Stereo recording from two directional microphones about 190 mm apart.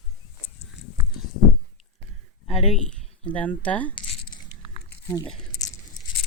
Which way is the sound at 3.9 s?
30° left (ahead or behind).